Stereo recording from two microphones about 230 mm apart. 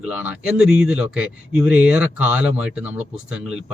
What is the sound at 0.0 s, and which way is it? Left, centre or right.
Speech, centre.